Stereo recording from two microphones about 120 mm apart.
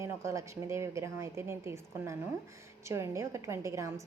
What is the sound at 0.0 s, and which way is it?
A woman's voice, 25° right (ahead or behind).